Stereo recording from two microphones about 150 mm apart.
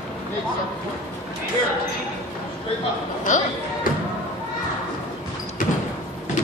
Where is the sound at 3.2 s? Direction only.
55° left (ahead or behind).